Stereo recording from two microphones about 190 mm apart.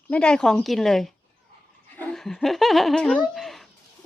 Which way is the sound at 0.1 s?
5° left (ahead or behind).